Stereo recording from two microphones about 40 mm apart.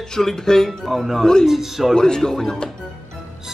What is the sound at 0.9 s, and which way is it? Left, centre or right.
Speech, centre.